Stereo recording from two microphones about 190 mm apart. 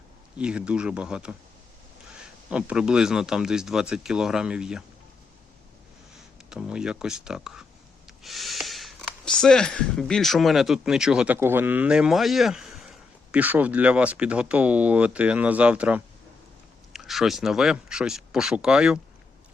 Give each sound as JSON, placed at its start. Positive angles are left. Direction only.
{"t": 0.3, "sound": "a man's voice", "side_deg": -5}
{"t": 6.5, "sound": "a man's voice", "side_deg": -5}